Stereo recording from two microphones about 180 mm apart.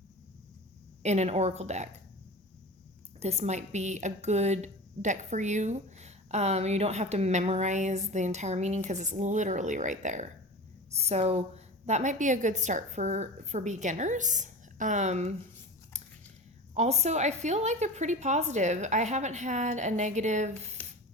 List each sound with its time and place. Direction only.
1.0 s a woman's voice: 40° right (ahead or behind)
3.2 s a woman's voice: 35° right (ahead or behind)
16.7 s a woman's voice: 40° right (ahead or behind)